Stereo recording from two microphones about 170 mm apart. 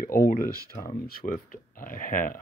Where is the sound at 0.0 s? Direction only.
55° left (ahead or behind).